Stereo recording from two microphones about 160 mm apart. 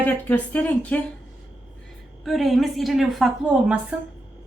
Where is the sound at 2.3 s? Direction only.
Centre (ahead or behind).